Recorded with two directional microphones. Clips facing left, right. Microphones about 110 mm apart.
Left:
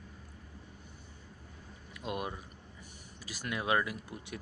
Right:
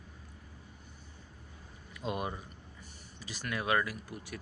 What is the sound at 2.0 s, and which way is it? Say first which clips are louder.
Speech: right 2 dB; 5° left (ahead or behind).